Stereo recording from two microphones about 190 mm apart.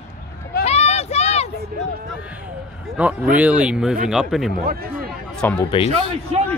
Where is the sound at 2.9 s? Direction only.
5° right (ahead or behind).